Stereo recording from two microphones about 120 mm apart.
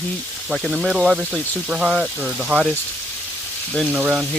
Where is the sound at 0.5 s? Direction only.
5° right (ahead or behind).